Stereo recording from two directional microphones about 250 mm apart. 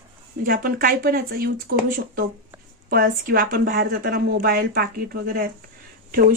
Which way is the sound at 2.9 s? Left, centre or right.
Right.